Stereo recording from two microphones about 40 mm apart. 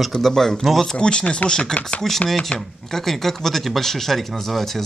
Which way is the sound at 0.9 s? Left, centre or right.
Left.